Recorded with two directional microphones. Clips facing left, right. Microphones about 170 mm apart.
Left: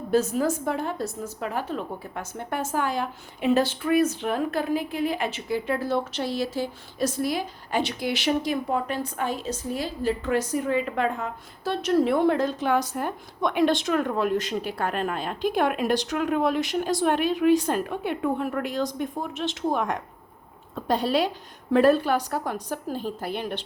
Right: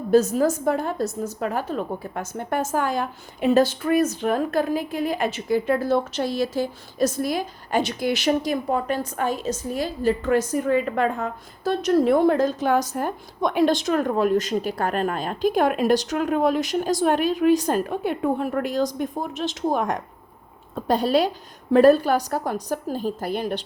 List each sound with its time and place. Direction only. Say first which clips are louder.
0.1 s a woman's voice: right 5 dB; 40° right (ahead or behind)